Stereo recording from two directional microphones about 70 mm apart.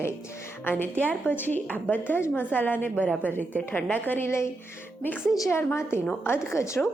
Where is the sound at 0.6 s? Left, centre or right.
Left.